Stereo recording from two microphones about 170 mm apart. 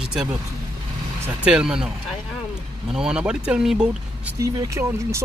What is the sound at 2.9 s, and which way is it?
Speech, 5° right (ahead or behind).